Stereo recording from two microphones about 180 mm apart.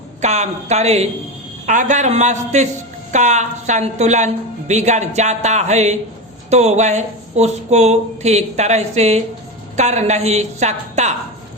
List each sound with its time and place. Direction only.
0.2 s a woman's voice: 40° right (ahead or behind)